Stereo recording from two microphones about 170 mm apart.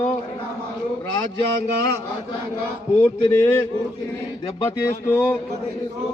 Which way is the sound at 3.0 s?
15° left (ahead or behind).